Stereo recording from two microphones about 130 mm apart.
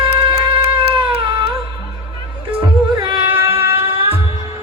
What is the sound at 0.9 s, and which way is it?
Cat, 40° right (ahead or behind).